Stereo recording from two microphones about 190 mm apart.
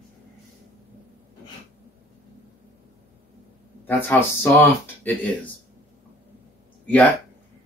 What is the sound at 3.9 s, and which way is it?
Speech, 10° left (ahead or behind).